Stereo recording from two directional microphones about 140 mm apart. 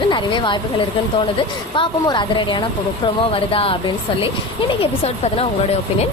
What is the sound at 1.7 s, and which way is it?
A woman's voice, 35° left (ahead or behind).